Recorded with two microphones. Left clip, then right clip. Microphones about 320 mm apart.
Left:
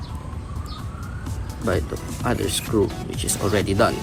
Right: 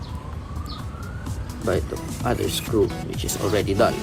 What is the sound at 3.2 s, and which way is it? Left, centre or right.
Speech, left.